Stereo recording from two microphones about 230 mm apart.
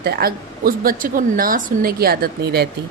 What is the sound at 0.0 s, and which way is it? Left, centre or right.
A woman's voice, right.